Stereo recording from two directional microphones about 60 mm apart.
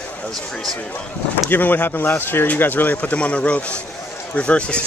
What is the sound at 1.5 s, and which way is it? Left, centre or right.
Speech, left.